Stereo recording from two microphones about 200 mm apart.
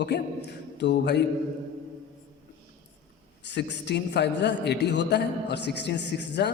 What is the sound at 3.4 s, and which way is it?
A woman's voice, 60° left (ahead or behind).